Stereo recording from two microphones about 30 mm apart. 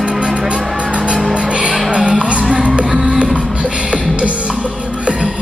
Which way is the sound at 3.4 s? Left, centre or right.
Right.